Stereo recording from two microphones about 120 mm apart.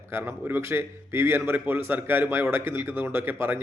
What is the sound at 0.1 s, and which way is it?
A man's voice, 20° right (ahead or behind).